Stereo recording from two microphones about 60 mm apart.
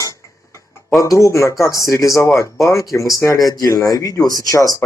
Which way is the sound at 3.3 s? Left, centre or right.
Left.